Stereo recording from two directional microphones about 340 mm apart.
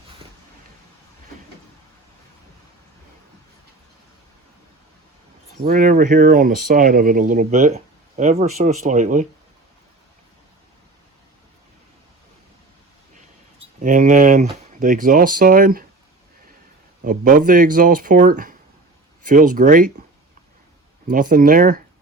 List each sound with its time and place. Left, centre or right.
5.6 s speech: right
13.8 s speech: right
17.0 s speech: right
21.1 s speech: right